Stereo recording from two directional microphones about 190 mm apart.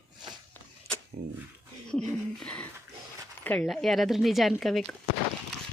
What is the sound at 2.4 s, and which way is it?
Speech, 5° left (ahead or behind).